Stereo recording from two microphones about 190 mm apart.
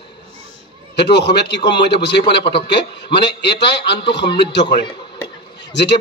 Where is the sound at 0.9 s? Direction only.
60° left (ahead or behind).